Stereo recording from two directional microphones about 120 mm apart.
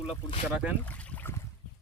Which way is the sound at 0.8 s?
15° left (ahead or behind).